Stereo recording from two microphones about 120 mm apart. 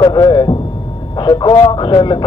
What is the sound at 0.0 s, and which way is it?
Speech, 40° left (ahead or behind).